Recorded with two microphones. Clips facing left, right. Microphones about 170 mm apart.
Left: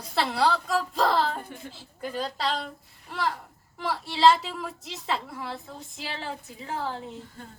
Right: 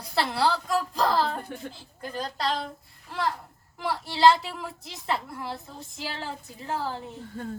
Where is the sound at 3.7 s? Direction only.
Centre (ahead or behind).